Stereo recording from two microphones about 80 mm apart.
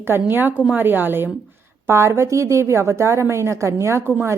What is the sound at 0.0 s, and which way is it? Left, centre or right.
A woman's voice, right.